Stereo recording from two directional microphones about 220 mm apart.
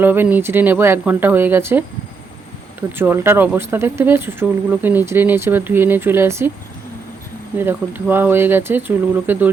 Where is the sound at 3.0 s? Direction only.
10° right (ahead or behind).